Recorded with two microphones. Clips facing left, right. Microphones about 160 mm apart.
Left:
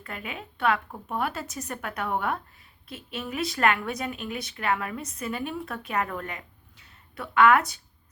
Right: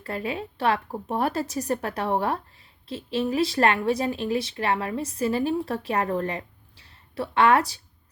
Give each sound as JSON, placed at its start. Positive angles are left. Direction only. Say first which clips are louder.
{"t": 0.0, "sound": "speech", "louder": "right 8 dB", "side_deg": -35}